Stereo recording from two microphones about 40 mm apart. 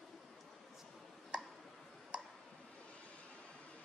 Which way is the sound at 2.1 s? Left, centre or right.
Right.